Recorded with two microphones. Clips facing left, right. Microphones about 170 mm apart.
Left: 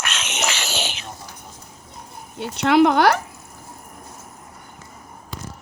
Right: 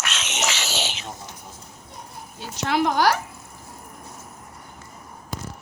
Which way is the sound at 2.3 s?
65° left (ahead or behind).